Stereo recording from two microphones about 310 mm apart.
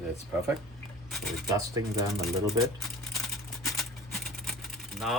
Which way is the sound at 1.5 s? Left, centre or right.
Centre.